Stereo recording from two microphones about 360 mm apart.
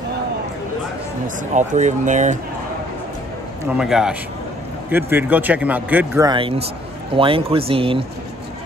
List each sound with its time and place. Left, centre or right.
1.7 s speech: centre
3.6 s a man's voice: centre